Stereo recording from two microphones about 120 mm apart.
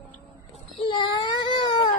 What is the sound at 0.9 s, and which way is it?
Speech, 40° left (ahead or behind).